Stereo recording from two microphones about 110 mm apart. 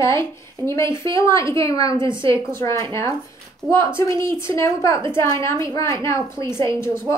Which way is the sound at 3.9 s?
25° left (ahead or behind).